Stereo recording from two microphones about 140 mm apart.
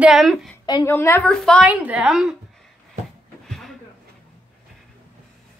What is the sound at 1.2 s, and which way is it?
Speech, 5° left (ahead or behind).